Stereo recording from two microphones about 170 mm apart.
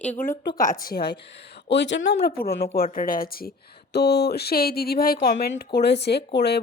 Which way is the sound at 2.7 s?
60° left (ahead or behind).